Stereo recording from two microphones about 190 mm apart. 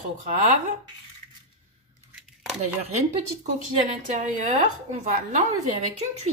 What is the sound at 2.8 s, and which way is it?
A woman's voice, 40° right (ahead or behind).